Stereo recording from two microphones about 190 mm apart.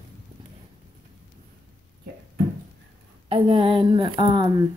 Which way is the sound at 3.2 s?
25° right (ahead or behind).